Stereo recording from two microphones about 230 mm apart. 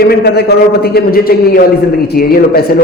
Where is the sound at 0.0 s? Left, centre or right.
Left.